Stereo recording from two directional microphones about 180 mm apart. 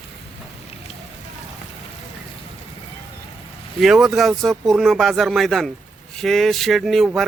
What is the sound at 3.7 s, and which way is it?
A man's voice, centre (ahead or behind).